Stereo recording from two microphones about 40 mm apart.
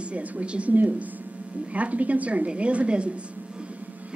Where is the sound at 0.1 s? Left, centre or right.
Right.